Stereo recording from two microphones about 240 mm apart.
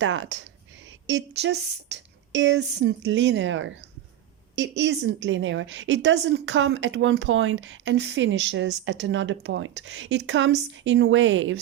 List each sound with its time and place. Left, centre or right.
0.0 s a woman's voice: right